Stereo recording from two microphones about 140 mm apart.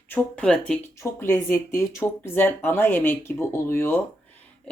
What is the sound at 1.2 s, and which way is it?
Speech, 15° left (ahead or behind).